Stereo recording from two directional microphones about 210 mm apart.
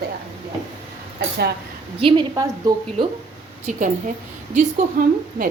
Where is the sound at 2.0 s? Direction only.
25° right (ahead or behind).